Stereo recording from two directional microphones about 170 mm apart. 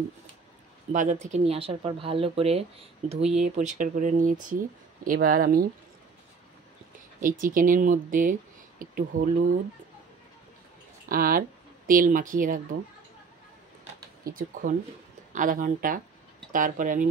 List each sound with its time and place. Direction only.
0.9 s speech: 45° right (ahead or behind)
7.2 s speech: 55° right (ahead or behind)
11.1 s speech: 60° right (ahead or behind)
14.2 s speech: 55° right (ahead or behind)